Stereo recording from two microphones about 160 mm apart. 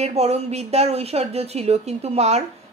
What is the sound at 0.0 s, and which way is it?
A woman's voice, 40° right (ahead or behind).